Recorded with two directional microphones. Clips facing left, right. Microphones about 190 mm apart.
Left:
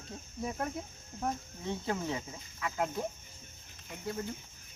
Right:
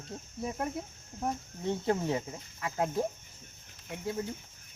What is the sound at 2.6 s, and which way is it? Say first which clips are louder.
Speech: right 3 dB; 25° right (ahead or behind).